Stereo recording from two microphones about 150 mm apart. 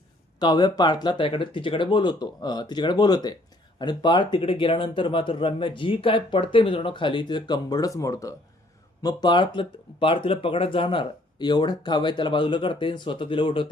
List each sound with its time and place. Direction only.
0.3 s speech: 30° left (ahead or behind)